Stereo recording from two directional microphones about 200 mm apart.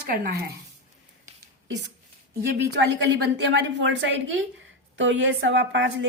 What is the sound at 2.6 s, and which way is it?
A woman's voice, 60° right (ahead or behind).